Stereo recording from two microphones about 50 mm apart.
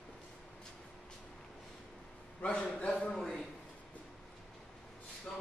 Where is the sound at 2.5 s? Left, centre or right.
Centre.